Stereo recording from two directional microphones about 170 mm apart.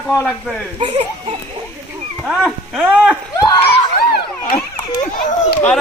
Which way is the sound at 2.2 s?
Centre (ahead or behind).